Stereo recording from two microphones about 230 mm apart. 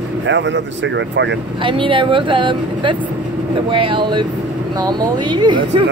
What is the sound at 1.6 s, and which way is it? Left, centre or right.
Speech, right.